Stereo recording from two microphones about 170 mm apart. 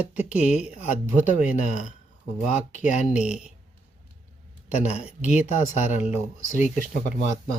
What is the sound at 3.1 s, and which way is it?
Speech, 5° right (ahead or behind).